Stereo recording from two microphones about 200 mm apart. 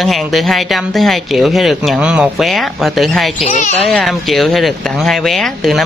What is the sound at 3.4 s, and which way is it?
Speech, 35° left (ahead or behind).